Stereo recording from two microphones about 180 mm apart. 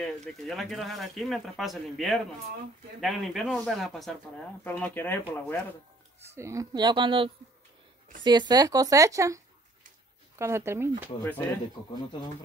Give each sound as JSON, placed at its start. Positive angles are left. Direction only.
{"t": 0.0, "sound": "speech", "side_deg": 0}
{"t": 6.2, "sound": "speech", "side_deg": -15}
{"t": 10.4, "sound": "speech", "side_deg": -15}
{"t": 11.2, "sound": "speech", "side_deg": 10}